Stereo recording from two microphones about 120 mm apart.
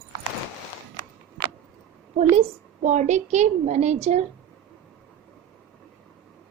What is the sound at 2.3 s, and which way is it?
A woman's voice, 70° right (ahead or behind).